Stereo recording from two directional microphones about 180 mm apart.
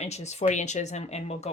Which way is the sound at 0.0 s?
40° left (ahead or behind).